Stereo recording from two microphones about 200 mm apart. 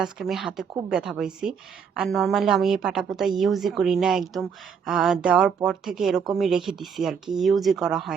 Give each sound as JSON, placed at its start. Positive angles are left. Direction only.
{"t": 0.0, "sound": "speech", "side_deg": 0}